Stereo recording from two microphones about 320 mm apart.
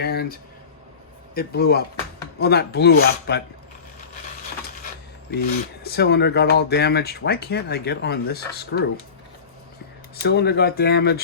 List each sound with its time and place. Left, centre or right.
0.0 s a sound: left
1.4 s speech: left
5.3 s speech: left
10.2 s speech: left